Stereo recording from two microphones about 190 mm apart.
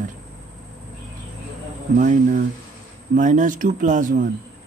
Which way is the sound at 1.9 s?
40° right (ahead or behind).